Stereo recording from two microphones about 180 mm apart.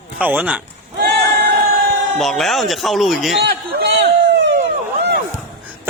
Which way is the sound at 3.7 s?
65° right (ahead or behind).